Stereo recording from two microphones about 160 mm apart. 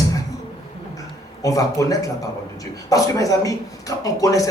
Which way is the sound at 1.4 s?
20° left (ahead or behind).